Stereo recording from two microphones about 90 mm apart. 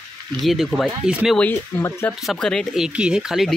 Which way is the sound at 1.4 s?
20° left (ahead or behind).